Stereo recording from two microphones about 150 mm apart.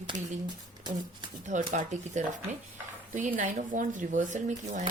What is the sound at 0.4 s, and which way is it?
Beatboxing, 30° right (ahead or behind).